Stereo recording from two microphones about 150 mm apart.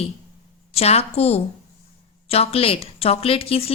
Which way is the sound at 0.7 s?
45° left (ahead or behind).